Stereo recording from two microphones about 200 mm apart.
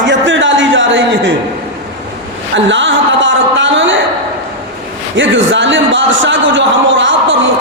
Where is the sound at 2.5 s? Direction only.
65° right (ahead or behind).